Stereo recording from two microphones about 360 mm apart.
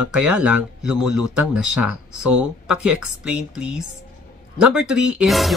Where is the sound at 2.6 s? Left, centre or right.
Centre.